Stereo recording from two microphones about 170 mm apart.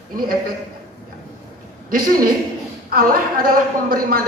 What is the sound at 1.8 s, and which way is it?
A woman's voice, 60° right (ahead or behind).